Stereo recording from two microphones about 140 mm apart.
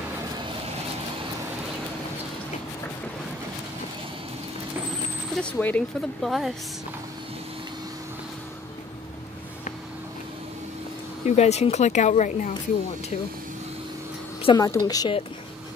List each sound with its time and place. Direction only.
5.3 s speech: 10° left (ahead or behind)
5.9 s a woman's voice: centre (ahead or behind)
11.2 s speech: 55° left (ahead or behind)
14.4 s a woman's voice: 35° left (ahead or behind)